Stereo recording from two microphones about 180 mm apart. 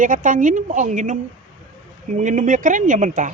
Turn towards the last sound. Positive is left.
turn(degrees=-45)  # may be behind; listen again after turning